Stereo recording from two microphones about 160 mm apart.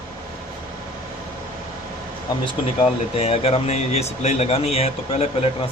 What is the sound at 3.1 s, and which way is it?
Speech, 40° left (ahead or behind).